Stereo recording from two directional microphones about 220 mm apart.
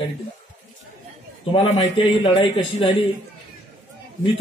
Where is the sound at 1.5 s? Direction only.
25° left (ahead or behind).